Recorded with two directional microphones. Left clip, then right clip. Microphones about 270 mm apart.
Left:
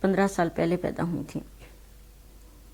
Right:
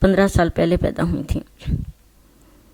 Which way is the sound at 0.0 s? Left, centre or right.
Right.